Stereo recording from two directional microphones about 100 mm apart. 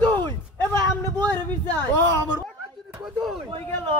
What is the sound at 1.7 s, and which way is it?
Speech, 15° left (ahead or behind).